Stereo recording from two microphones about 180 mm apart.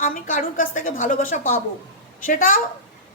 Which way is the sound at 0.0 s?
50° left (ahead or behind).